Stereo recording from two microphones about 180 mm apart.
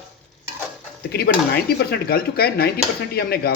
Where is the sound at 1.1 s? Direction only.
60° left (ahead or behind).